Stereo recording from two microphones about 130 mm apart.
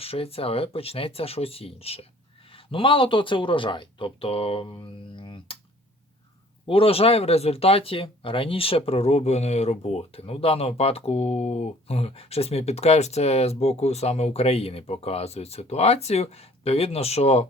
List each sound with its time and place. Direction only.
0.0 s speech: 50° left (ahead or behind)
6.7 s speech: 45° left (ahead or behind)